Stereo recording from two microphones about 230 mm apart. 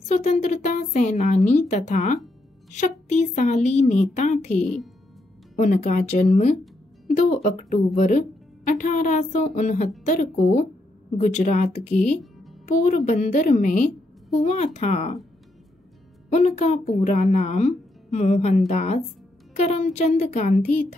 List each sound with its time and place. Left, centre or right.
0.1 s a woman's voice: left
4.6 s speech: centre
5.6 s a woman's voice: left
16.3 s speech: left